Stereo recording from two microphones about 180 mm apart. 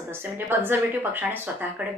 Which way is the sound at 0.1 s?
10° right (ahead or behind).